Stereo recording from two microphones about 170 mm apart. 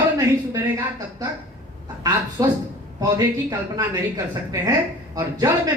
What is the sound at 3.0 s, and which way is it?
Speech, 20° right (ahead or behind).